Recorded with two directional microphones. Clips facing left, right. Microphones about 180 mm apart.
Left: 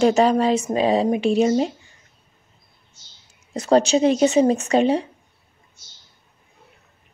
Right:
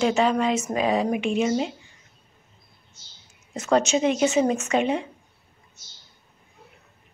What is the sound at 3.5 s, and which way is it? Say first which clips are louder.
A woman's voice: left 4 dB; 35° left (ahead or behind).